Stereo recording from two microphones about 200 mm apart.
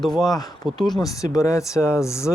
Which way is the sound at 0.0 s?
Centre (ahead or behind).